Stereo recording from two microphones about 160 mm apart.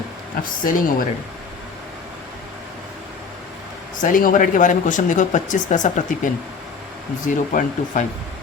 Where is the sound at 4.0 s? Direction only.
60° left (ahead or behind).